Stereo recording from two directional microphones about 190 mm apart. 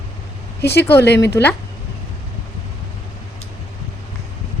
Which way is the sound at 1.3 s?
10° left (ahead or behind).